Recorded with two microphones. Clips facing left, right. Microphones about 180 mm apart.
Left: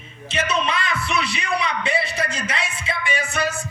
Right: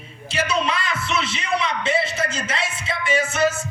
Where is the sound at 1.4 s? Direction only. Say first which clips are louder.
Right 1 dB; 25° right (ahead or behind).